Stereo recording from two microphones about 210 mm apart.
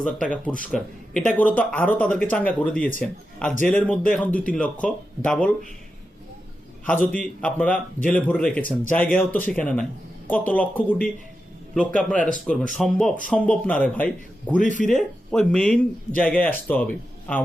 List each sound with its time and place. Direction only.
0.0 s speech: 5° left (ahead or behind)
6.8 s speech: 5° left (ahead or behind)
14.6 s speech: 35° left (ahead or behind)
14.8 s speech: 5° left (ahead or behind)